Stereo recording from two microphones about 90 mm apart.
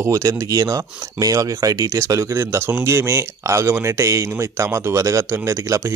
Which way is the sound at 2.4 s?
25° right (ahead or behind).